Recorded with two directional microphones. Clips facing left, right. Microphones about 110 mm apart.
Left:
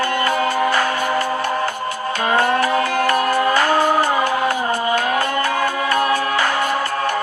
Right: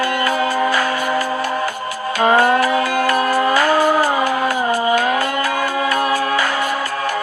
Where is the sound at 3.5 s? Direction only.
25° left (ahead or behind).